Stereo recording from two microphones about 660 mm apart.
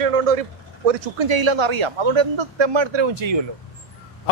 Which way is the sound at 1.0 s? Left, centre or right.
Right.